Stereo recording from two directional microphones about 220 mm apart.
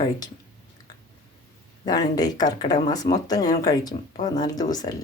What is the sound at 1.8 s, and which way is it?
Speech, 15° left (ahead or behind).